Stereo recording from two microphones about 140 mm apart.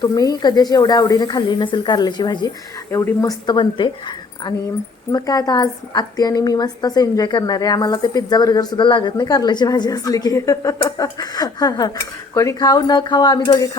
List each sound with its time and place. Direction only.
0.0 s a woman's voice: 30° left (ahead or behind)
2.9 s a woman's voice: 20° left (ahead or behind)
3.4 s speech: 35° left (ahead or behind)
5.1 s a woman's voice: 25° left (ahead or behind)